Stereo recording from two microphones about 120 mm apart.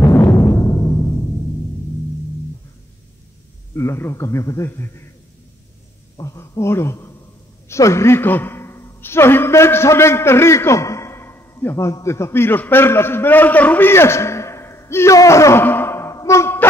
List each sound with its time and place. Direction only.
0.0 s timpani: 25° left (ahead or behind)
3.7 s a man's voice: 25° left (ahead or behind)
6.1 s a man's voice: 30° left (ahead or behind)